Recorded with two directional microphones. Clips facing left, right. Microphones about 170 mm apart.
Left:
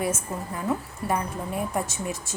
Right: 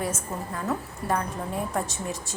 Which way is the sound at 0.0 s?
10° left (ahead or behind).